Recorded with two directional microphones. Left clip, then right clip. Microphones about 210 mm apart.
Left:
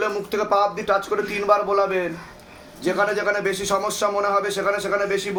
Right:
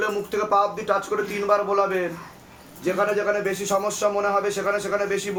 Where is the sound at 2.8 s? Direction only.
40° left (ahead or behind).